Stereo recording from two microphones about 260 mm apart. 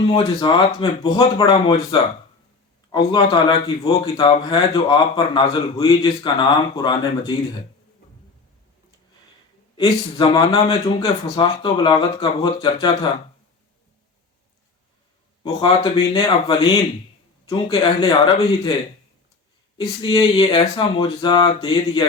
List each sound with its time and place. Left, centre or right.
0.0 s speech: left
9.7 s speech: centre
15.5 s speech: centre
19.7 s speech: centre